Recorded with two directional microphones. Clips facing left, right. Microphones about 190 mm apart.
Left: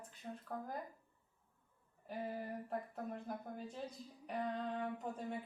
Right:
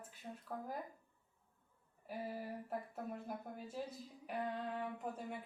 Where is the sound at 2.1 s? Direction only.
5° right (ahead or behind).